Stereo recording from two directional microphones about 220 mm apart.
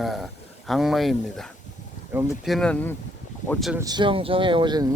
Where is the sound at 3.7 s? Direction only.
15° right (ahead or behind).